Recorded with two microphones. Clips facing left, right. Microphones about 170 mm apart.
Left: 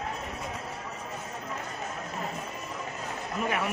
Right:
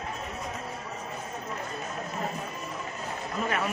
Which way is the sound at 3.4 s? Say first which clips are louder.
Even; 15° left (ahead or behind).